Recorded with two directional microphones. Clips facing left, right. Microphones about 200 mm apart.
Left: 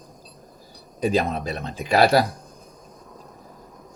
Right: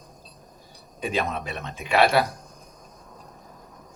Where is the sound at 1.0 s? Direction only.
35° left (ahead or behind).